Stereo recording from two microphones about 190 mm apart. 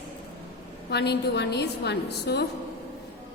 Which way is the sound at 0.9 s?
60° left (ahead or behind).